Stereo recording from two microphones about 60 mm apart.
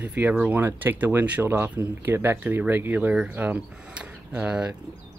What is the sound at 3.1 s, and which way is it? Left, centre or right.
Speech, right.